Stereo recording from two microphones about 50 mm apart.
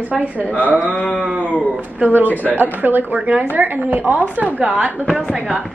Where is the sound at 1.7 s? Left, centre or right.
Right.